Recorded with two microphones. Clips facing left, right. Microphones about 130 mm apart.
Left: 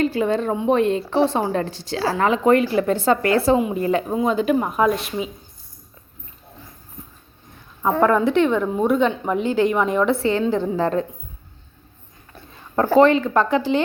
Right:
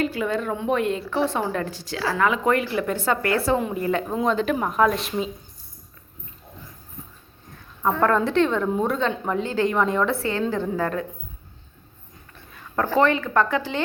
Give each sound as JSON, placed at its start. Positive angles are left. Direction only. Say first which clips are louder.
{"t": 0.0, "sound": "speech", "louder": "left 4 dB", "side_deg": 30}
{"t": 4.1, "sound": "a woman's voice", "louder": "left 3 dB", "side_deg": 5}
{"t": 8.0, "sound": "a woman's voice", "louder": "left 3 dB", "side_deg": 15}
{"t": 9.0, "sound": "a woman's voice", "louder": "left 4 dB", "side_deg": 15}
{"t": 12.7, "sound": "speech", "louder": "left 5 dB", "side_deg": 35}
{"t": 13.0, "sound": "speech", "louder": "left 5 dB", "side_deg": 20}